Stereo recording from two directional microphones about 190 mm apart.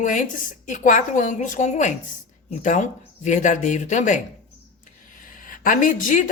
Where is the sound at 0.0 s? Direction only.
45° left (ahead or behind).